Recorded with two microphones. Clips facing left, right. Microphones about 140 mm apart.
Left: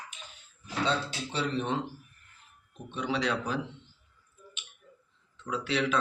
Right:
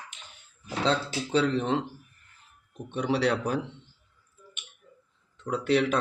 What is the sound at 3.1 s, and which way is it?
Speech, 60° right (ahead or behind).